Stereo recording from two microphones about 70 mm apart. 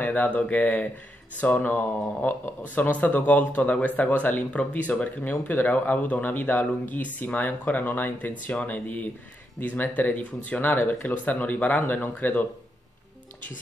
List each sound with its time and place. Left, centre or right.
0.0 s speech: left